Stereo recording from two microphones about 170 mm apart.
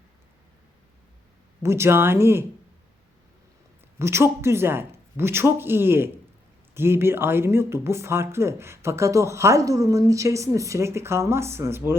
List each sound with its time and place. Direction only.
1.6 s speech: 15° right (ahead or behind)
3.9 s speech: 15° right (ahead or behind)